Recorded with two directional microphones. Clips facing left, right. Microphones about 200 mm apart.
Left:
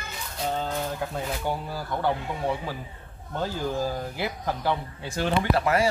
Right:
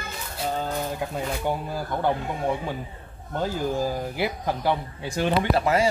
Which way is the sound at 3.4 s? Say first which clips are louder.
Right 2 dB; 15° right (ahead or behind).